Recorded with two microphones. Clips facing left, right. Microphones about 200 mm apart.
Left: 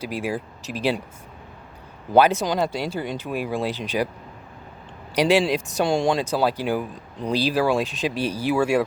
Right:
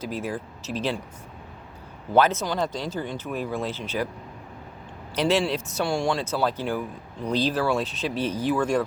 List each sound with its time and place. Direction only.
0.0 s speech: 10° left (ahead or behind)
2.1 s speech: 10° left (ahead or behind)
5.1 s speech: 10° left (ahead or behind)